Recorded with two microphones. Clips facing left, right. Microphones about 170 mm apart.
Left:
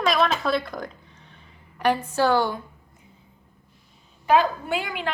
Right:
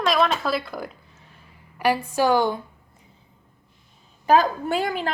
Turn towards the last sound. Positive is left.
turn(degrees=-40)  # may be behind; listen again after turning